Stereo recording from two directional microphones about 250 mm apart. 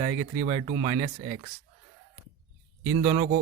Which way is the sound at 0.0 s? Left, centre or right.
Right.